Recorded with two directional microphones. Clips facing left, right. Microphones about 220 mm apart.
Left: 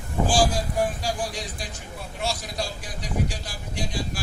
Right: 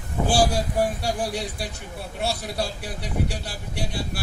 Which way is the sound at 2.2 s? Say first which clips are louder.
Right 3 dB; 60° right (ahead or behind).